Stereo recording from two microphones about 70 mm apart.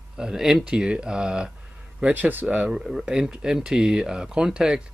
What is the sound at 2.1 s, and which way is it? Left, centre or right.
Speech, right.